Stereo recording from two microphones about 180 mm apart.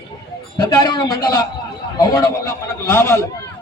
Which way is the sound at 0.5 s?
20° left (ahead or behind).